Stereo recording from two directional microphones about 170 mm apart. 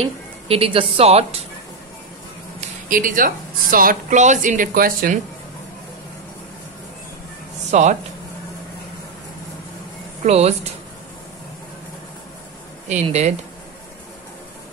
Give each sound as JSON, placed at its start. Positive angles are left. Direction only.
{"t": 0.0, "sound": "speech", "side_deg": -35}
{"t": 2.6, "sound": "a woman's voice", "side_deg": -50}
{"t": 7.7, "sound": "a woman's voice", "side_deg": -45}
{"t": 10.2, "sound": "speech", "side_deg": -40}
{"t": 12.8, "sound": "speech", "side_deg": -40}